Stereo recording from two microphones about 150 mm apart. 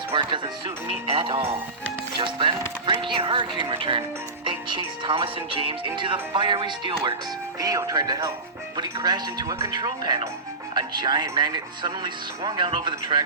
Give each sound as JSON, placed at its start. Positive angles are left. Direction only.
{"t": 0.1, "sound": "speech", "side_deg": -35}